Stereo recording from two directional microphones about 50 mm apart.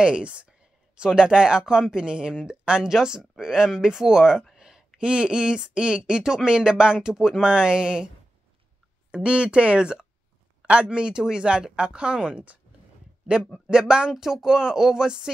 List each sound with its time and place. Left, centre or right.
0.0 s speech: right
9.1 s speech: right
13.7 s speech: centre